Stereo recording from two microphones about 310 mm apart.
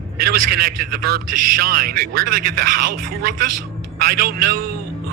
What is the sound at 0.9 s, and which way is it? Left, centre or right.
Speech, right.